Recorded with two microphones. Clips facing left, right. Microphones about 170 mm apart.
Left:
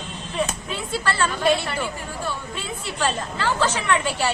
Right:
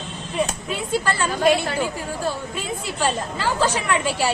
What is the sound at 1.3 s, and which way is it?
Speech, 40° right (ahead or behind).